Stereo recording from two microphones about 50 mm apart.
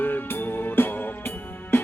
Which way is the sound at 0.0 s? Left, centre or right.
Left.